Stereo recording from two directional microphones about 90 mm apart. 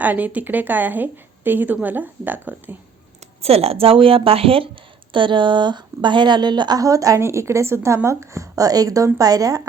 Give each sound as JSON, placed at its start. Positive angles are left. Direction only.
{"t": 0.0, "sound": "a woman's voice", "side_deg": -20}
{"t": 3.7, "sound": "speech", "side_deg": -90}
{"t": 6.7, "sound": "speech", "side_deg": -40}